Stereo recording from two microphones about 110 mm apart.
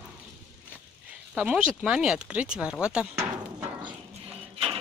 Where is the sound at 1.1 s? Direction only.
10° right (ahead or behind).